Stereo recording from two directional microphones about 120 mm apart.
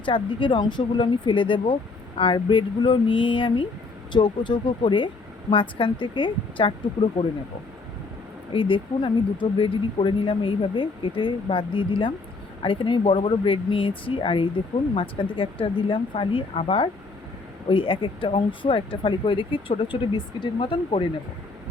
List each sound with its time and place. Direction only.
0.0 s speech: 45° left (ahead or behind)
8.5 s speech: 45° left (ahead or behind)